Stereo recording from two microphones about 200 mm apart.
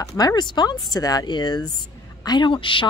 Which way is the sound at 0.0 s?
20° left (ahead or behind).